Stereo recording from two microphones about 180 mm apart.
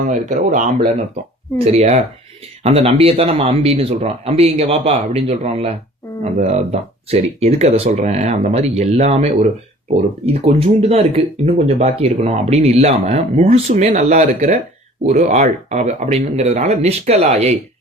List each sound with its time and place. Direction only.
0.1 s speech: 45° right (ahead or behind)
1.5 s speech: 35° right (ahead or behind)